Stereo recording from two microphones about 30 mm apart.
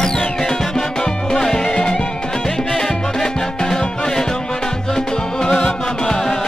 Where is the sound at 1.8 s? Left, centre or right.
Left.